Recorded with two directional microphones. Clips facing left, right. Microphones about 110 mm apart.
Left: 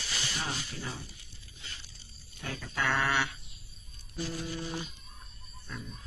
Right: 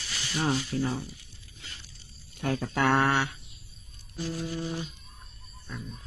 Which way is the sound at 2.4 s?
55° right (ahead or behind).